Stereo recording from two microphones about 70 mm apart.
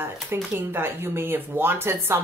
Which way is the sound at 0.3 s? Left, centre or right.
Right.